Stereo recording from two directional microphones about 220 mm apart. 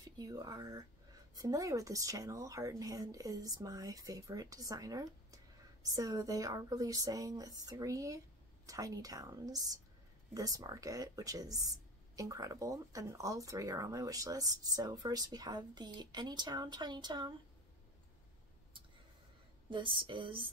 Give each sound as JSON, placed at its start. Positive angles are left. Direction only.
{"t": 0.2, "sound": "speech", "side_deg": -15}
{"t": 19.7, "sound": "a woman's voice", "side_deg": -20}